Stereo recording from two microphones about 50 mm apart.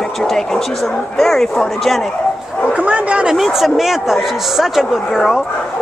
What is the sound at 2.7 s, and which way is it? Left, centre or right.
Speech, right.